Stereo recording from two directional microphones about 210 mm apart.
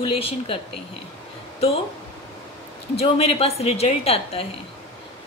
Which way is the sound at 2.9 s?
30° left (ahead or behind).